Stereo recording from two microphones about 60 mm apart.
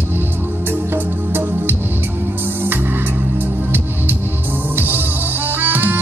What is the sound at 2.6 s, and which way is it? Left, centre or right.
Music, right.